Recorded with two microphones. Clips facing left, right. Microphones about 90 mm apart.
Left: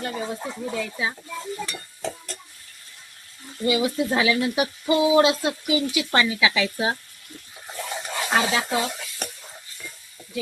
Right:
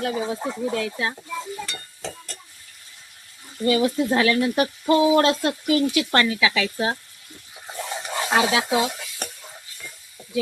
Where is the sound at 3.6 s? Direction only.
10° left (ahead or behind).